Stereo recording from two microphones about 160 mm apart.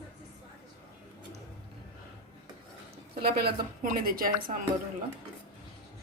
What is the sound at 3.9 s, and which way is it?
Speech, 65° right (ahead or behind).